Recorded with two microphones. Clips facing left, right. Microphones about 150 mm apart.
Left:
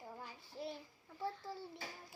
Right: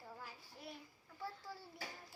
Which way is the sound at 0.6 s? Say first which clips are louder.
Left 9 dB; 25° left (ahead or behind).